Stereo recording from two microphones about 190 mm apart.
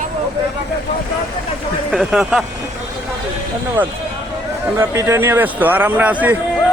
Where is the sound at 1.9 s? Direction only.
Centre (ahead or behind).